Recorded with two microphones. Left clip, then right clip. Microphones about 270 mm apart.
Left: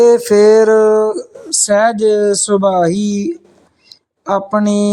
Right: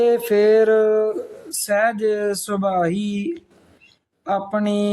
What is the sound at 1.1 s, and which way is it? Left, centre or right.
Speech, centre.